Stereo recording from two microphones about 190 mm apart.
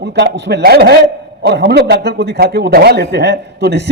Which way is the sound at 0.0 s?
65° right (ahead or behind).